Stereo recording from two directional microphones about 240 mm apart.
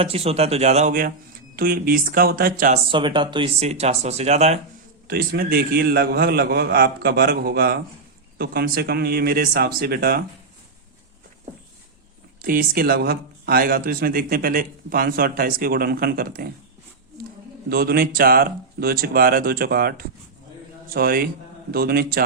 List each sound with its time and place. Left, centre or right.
0.0 s speech: right
2.9 s speech: centre
5.0 s speech: right
12.4 s speech: right
17.7 s speech: right